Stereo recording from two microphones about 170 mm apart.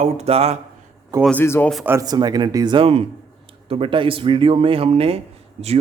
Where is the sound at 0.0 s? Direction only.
40° right (ahead or behind).